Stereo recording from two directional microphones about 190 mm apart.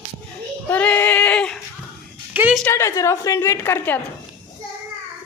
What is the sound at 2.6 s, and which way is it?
A woman's voice, 15° left (ahead or behind).